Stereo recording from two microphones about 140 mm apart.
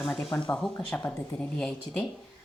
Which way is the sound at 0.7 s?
15° left (ahead or behind).